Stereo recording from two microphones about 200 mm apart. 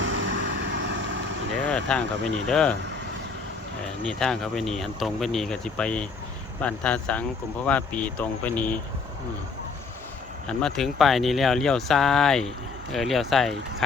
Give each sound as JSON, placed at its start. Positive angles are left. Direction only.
{"t": 0.0, "sound": "vehicle", "side_deg": -70}
{"t": 1.6, "sound": "speech", "side_deg": 5}
{"t": 4.2, "sound": "speech", "side_deg": 0}
{"t": 10.4, "sound": "speech", "side_deg": 5}